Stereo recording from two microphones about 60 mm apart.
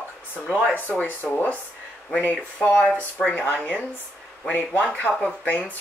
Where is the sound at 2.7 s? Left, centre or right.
Centre.